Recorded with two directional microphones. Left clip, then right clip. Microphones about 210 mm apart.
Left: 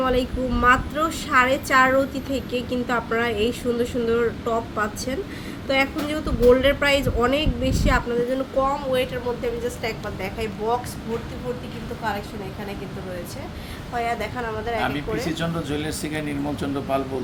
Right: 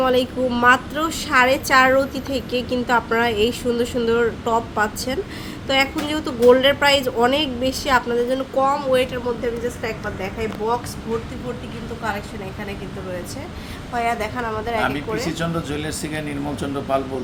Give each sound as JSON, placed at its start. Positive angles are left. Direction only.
{"t": 0.0, "sound": "a woman's voice", "side_deg": -15}
{"t": 13.9, "sound": "a woman's voice", "side_deg": -10}